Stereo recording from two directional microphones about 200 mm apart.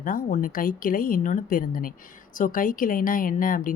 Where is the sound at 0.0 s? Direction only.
45° left (ahead or behind).